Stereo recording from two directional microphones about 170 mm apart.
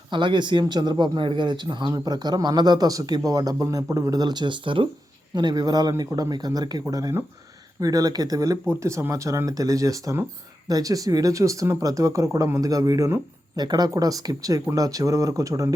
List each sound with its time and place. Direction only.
0.1 s speech: 30° right (ahead or behind)